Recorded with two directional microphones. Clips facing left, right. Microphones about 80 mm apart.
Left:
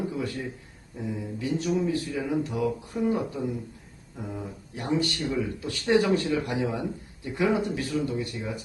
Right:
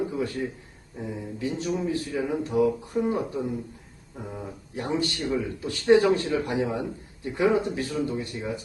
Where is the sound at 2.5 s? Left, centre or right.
Right.